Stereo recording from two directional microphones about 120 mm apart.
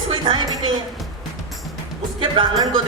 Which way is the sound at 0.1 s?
40° right (ahead or behind).